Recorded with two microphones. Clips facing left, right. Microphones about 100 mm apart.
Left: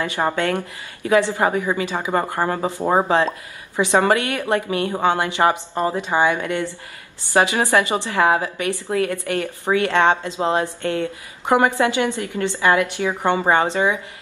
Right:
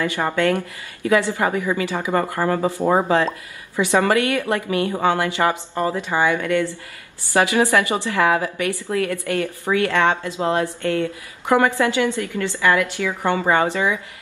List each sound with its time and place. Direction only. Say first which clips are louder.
0.0 s a woman's voice: right 1 dB; 20° left (ahead or behind)